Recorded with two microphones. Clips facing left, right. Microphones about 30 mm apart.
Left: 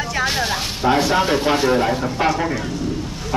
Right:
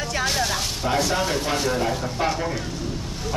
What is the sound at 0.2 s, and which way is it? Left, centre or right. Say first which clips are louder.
Speech: left 3 dB; left.